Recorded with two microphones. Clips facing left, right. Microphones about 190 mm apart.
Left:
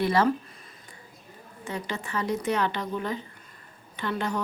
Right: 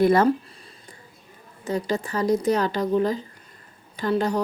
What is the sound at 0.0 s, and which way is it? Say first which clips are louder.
Speech: right 6 dB; 50° right (ahead or behind).